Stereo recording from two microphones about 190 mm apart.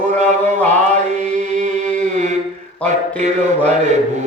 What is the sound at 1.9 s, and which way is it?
Mantra, 40° right (ahead or behind).